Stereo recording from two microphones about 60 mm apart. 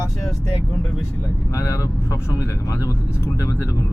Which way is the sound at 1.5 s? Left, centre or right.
Left.